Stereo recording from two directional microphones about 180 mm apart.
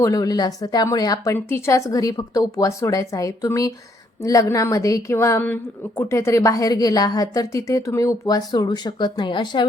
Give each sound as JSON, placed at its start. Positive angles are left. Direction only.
{"t": 0.0, "sound": "a woman's voice", "side_deg": 20}